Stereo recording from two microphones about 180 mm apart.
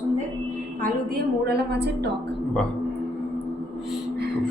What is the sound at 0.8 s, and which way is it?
A woman's voice, 60° right (ahead or behind).